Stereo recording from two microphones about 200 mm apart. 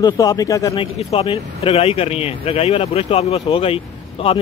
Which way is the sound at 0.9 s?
30° left (ahead or behind).